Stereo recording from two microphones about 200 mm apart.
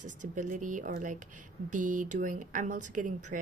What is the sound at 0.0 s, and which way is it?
A woman's voice, 40° right (ahead or behind).